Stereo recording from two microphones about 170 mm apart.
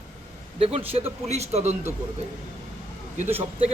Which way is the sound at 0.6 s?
35° right (ahead or behind).